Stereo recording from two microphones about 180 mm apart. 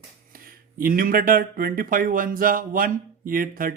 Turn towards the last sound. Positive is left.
turn(degrees=-50)  # may be behind; listen again after turning